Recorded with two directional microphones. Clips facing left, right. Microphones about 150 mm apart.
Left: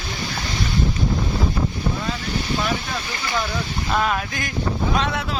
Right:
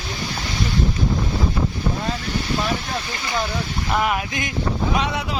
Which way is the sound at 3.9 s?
15° right (ahead or behind).